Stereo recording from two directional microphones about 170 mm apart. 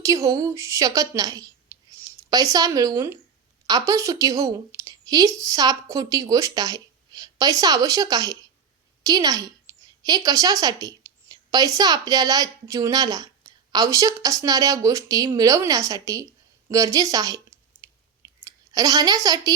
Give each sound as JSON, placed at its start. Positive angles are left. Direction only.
{"t": 0.0, "sound": "a woman's voice", "side_deg": -20}
{"t": 16.6, "sound": "clicking", "side_deg": -20}
{"t": 18.4, "sound": "a woman's voice", "side_deg": -20}